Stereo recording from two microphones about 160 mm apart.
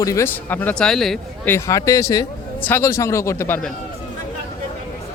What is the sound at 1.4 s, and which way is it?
Speech, 15° left (ahead or behind).